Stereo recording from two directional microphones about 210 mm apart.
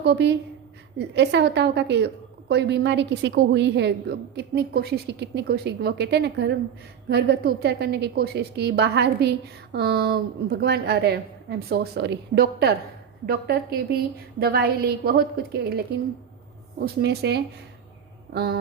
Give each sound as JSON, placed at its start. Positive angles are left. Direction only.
{"t": 0.0, "sound": "a woman's voice", "side_deg": -55}